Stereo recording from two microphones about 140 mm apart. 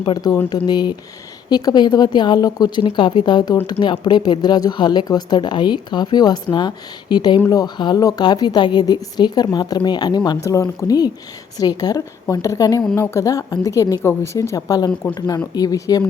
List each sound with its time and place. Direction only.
0.0 s a woman's voice: 30° left (ahead or behind)